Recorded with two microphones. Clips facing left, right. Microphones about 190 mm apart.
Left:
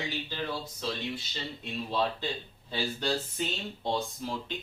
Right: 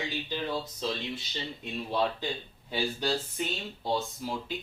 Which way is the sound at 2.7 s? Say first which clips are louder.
Right 1 dB; 5° right (ahead or behind).